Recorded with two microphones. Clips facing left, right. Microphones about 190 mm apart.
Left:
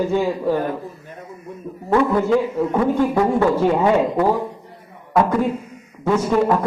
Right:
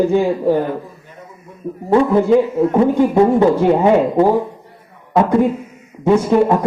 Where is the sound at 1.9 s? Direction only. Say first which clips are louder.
Right 5 dB; 20° right (ahead or behind).